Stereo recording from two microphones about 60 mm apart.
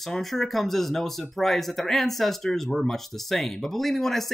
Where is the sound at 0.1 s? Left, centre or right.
Centre.